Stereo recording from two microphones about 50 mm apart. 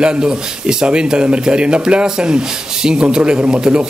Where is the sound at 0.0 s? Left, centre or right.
Centre.